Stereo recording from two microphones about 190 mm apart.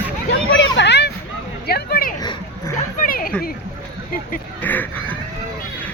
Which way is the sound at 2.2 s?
20° left (ahead or behind).